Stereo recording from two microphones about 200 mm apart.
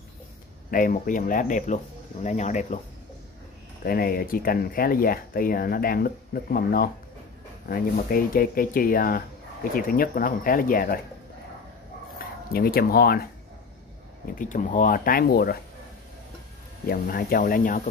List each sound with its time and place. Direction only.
0.7 s speech: 45° left (ahead or behind)
3.8 s speech: 50° left (ahead or behind)
12.5 s speech: 50° left (ahead or behind)
14.4 s speech: 40° left (ahead or behind)
16.8 s speech: 45° left (ahead or behind)